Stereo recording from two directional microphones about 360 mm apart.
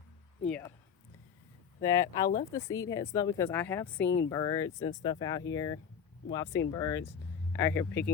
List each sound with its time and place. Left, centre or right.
0.4 s speech: centre
1.8 s speech: centre
4.0 s speech: left
4.3 s speech: centre